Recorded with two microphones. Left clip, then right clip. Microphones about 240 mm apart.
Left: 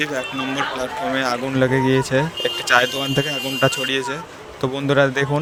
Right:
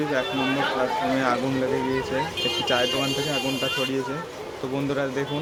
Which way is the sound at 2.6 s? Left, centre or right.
Left.